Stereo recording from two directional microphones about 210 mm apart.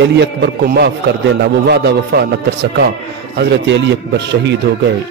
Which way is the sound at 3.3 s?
55° right (ahead or behind).